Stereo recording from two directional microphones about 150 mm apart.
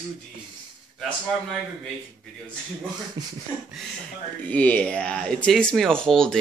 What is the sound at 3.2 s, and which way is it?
Speech, 30° right (ahead or behind).